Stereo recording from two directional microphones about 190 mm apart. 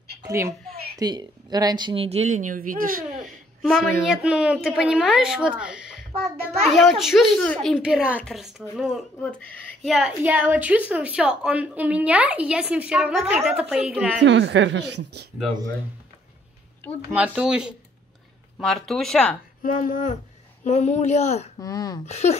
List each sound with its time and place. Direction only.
0.2 s a woman's voice: 15° right (ahead or behind); by 3.1 s 45° right (ahead or behind)
4.1 s speech: 5° right (ahead or behind)
14.2 s a woman's voice: 70° right (ahead or behind)
17.1 s speech: 5° right (ahead or behind)
19.6 s a sound: 45° left (ahead or behind)
20.6 s speech: 35° left (ahead or behind)
21.5 s speech: 20° left (ahead or behind)
22.0 s speech: 35° left (ahead or behind)